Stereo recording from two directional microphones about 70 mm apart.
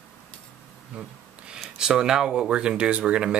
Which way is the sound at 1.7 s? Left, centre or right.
Centre.